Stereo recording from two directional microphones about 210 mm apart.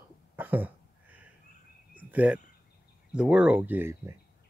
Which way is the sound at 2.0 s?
5° right (ahead or behind).